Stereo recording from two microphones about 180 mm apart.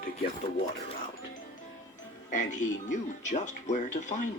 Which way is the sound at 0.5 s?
35° left (ahead or behind).